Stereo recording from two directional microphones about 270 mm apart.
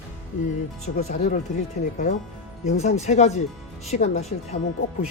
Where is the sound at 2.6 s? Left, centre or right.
Left.